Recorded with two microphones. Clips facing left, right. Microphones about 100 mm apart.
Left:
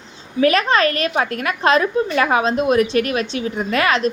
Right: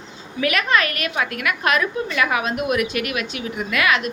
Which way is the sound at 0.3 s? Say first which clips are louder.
Left 5 dB; 35° left (ahead or behind).